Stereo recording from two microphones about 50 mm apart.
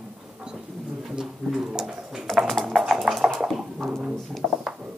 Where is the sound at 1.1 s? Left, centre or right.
Centre.